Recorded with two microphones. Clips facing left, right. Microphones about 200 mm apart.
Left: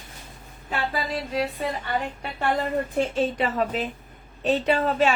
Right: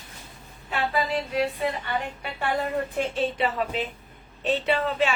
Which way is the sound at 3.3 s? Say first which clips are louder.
Left 2 dB; 40° left (ahead or behind).